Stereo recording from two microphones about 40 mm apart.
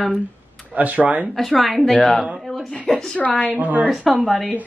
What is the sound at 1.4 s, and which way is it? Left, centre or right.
Speech, centre.